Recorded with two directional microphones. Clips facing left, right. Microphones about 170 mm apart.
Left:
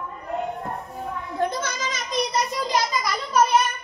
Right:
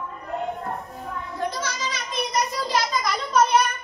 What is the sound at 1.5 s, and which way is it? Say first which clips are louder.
Children playing: left 1 dB; 50° left (ahead or behind).